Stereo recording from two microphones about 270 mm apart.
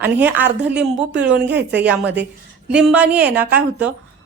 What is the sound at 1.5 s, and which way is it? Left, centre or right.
Speech, right.